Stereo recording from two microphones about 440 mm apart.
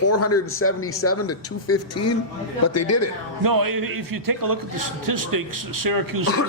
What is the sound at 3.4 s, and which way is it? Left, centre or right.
A man's voice, right.